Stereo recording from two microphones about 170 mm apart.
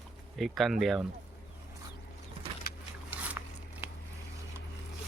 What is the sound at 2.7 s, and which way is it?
Vehicle, 65° left (ahead or behind).